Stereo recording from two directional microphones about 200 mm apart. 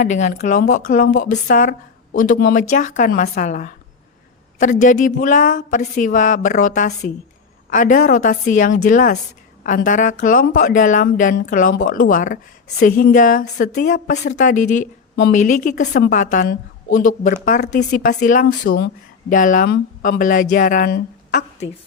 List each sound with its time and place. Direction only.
0.0 s a woman's voice: 40° left (ahead or behind)